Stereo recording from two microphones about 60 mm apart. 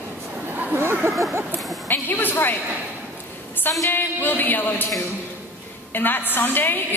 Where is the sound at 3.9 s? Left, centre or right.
Left.